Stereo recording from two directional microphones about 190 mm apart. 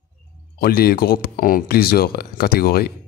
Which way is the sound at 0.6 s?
55° left (ahead or behind).